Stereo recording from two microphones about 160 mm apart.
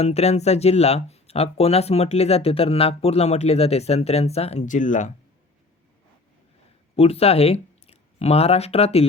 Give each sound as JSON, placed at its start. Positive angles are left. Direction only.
{"t": 0.0, "sound": "speech", "side_deg": 40}
{"t": 6.9, "sound": "speech", "side_deg": 40}